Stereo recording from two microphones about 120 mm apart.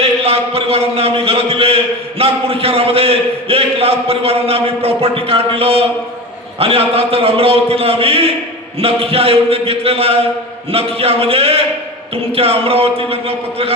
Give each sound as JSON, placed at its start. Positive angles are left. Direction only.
{"t": 0.0, "sound": "a man's voice", "side_deg": -55}